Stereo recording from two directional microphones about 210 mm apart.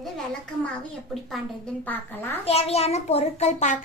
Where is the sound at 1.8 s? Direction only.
10° left (ahead or behind).